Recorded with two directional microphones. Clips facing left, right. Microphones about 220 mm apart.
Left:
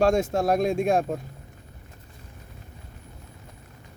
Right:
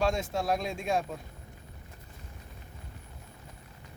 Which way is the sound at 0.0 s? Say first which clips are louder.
Left 8 dB; 45° left (ahead or behind).